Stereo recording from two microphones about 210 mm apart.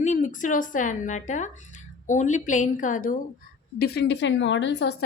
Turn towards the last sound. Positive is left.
turn(degrees=60)  # may be behind; listen again after turning